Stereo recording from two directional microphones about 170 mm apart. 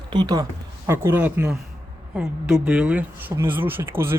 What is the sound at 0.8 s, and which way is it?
Speech, 15° right (ahead or behind).